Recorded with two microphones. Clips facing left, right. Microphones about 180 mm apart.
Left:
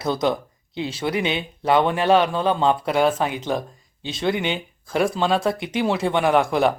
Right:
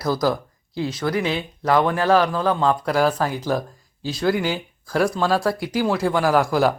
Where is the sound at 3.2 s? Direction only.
20° left (ahead or behind).